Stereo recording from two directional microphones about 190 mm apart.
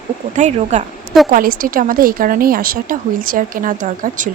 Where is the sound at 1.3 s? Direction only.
50° right (ahead or behind).